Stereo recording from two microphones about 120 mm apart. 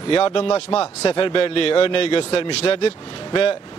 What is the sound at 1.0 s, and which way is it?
Speech, 45° left (ahead or behind).